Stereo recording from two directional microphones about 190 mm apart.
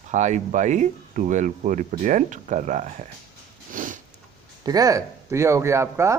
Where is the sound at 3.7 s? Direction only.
45° right (ahead or behind).